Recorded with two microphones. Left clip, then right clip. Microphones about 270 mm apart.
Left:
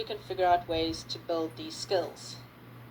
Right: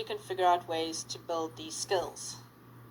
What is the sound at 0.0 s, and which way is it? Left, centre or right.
Speech, right.